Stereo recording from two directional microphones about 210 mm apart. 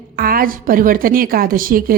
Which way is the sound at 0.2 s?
45° right (ahead or behind).